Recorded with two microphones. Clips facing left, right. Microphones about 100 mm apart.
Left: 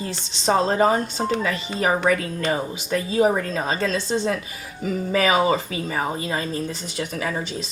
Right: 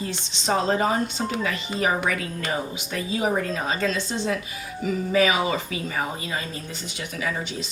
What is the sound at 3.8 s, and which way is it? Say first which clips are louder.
A woman's voice: left 4 dB; 45° left (ahead or behind).